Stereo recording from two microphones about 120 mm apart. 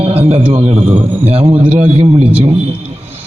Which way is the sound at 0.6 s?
65° right (ahead or behind).